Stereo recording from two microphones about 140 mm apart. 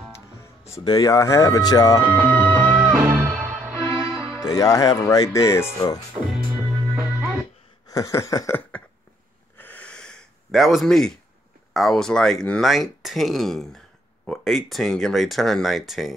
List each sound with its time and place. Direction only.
0.4 s speech: 20° left (ahead or behind)
2.1 s music: 10° left (ahead or behind)
2.8 s music: 5° right (ahead or behind)
4.4 s speech: 25° left (ahead or behind)
6.3 s music: centre (ahead or behind)
7.0 s music: 15° right (ahead or behind)
7.9 s speech: 25° left (ahead or behind)
9.6 s a sound: 10° left (ahead or behind)
11.7 s speech: centre (ahead or behind)